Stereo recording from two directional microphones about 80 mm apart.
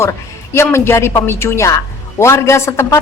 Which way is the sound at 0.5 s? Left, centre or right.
Left.